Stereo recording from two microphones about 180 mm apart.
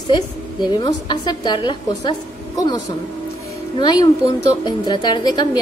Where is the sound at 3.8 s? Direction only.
25° left (ahead or behind).